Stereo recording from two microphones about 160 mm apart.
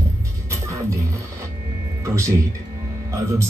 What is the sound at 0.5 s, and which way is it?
Music, 20° right (ahead or behind).